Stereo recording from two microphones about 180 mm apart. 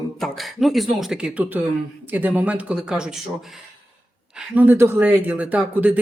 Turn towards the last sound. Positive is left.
turn(degrees=-10)  # may be behind; listen again after turning